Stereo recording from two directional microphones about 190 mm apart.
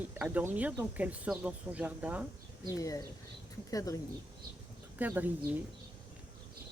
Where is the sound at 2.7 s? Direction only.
15° left (ahead or behind).